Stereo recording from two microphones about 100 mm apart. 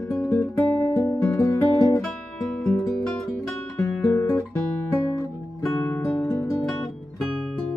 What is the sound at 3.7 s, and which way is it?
Guitar, 25° left (ahead or behind).